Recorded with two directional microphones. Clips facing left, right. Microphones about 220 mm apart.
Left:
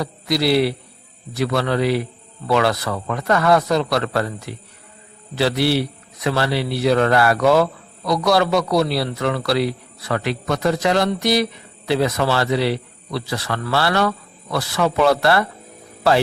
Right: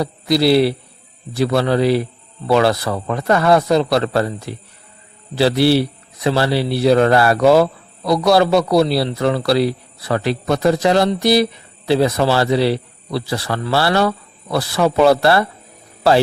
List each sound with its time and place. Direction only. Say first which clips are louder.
0.0 s a man's voice: right 5 dB; 30° right (ahead or behind)